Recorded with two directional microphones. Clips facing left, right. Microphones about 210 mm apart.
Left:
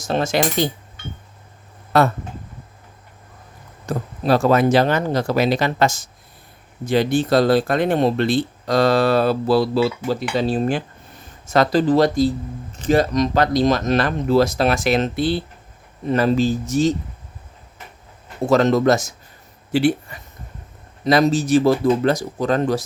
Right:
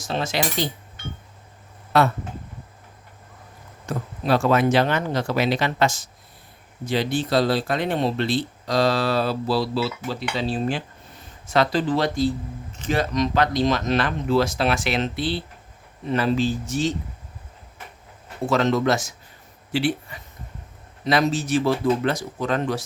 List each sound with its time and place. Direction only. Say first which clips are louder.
0.1 s speech: left 6 dB; 50° left (ahead or behind)
1.9 s speech: left 3 dB; 45° left (ahead or behind)
3.8 s speech: left 4 dB; 35° left (ahead or behind)
18.4 s speech: left 5 dB; 40° left (ahead or behind)